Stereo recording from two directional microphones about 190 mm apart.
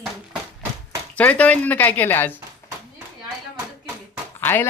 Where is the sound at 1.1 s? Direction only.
10° left (ahead or behind).